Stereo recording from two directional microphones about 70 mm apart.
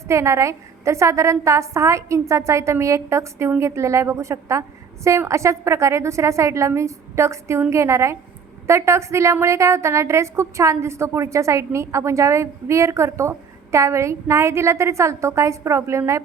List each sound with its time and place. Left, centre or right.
0.1 s a woman's voice: right